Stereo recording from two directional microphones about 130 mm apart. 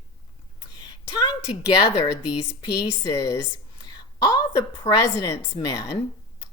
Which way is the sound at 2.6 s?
30° left (ahead or behind).